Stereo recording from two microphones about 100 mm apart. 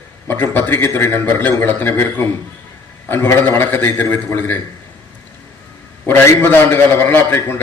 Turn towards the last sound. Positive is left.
turn(degrees=20)  # may be behind; listen again after turning